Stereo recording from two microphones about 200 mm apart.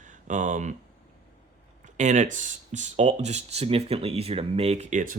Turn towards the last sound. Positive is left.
turn(degrees=-40)  # may be behind; listen again after turning